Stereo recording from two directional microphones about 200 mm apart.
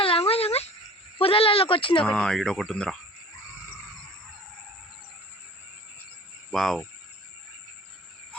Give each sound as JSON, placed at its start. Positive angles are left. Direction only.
{"t": 0.0, "sound": "a sound", "side_deg": 30}
{"t": 1.2, "sound": "speech", "side_deg": 25}
{"t": 2.0, "sound": "speech", "side_deg": 5}
{"t": 6.5, "sound": "speech", "side_deg": 0}